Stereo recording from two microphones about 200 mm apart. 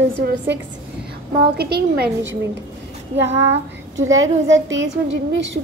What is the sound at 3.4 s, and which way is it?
A child's voice, 70° right (ahead or behind).